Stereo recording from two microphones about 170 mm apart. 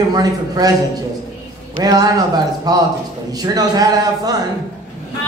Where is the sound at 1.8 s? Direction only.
20° right (ahead or behind).